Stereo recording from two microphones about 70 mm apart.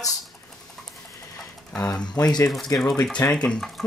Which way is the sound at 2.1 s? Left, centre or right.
Left.